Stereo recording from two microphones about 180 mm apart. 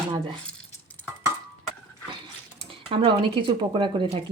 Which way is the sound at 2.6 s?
30° right (ahead or behind).